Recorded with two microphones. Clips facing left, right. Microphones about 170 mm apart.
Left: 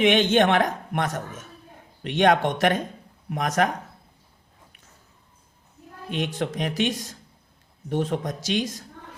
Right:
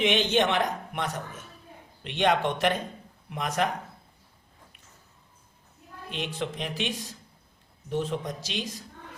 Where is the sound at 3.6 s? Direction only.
55° left (ahead or behind).